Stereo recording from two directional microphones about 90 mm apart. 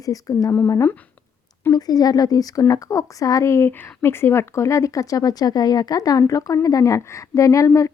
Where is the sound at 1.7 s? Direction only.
45° left (ahead or behind).